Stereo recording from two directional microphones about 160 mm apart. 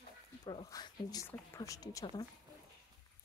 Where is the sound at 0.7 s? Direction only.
25° left (ahead or behind).